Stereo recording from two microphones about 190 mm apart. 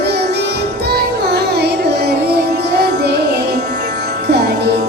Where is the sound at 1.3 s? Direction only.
60° right (ahead or behind).